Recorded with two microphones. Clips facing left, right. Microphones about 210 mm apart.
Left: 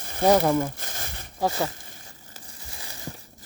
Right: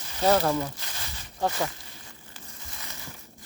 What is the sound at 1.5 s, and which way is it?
Speech, 30° left (ahead or behind).